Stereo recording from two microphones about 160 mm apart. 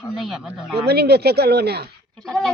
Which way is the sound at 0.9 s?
90° right.